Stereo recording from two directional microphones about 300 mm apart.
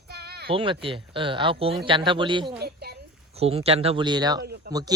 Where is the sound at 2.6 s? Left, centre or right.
Right.